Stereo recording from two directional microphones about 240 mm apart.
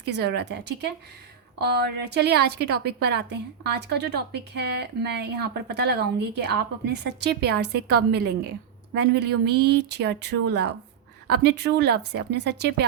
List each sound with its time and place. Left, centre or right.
0.1 s a woman's voice: right